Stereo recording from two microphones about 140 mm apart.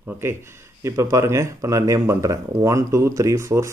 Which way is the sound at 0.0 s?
15° right (ahead or behind).